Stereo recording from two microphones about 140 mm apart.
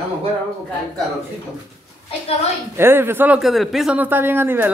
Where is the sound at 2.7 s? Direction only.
15° right (ahead or behind).